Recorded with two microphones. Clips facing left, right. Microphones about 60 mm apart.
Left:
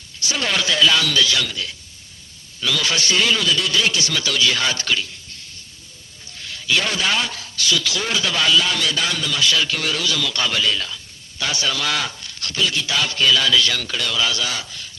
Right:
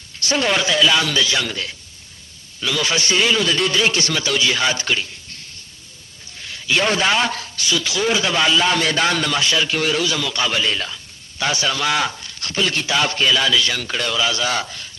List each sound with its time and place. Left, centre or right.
0.3 s speech: right
0.9 s a man's voice: right
1.5 s speech: right
2.6 s a man's voice: right
3.4 s speech: right
4.1 s a man's voice: right
6.7 s a man's voice: right
7.3 s speech: right
7.6 s a man's voice: right
12.6 s speech: right
13.1 s a man's voice: right